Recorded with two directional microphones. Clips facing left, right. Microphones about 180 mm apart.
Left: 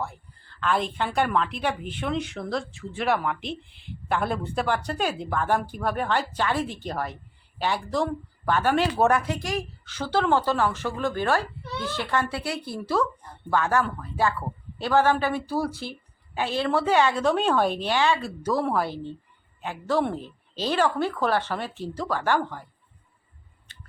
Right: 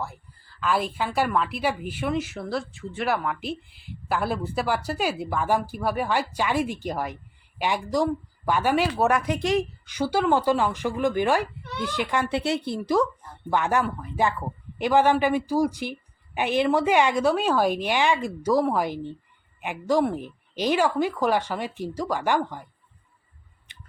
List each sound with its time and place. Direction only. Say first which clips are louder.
0.0 s a woman's voice: left 1 dB; 5° right (ahead or behind)
23.7 s scissors: even; 15° right (ahead or behind)